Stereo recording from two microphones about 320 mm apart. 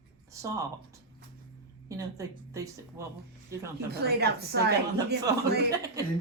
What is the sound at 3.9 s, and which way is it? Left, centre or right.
Speech, right.